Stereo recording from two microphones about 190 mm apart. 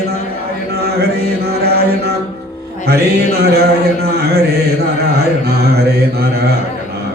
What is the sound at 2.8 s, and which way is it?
Mantra, 55° right (ahead or behind).